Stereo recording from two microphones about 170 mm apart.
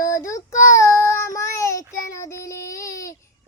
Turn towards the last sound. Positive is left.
turn(degrees=20)  # may be behind; listen again after turning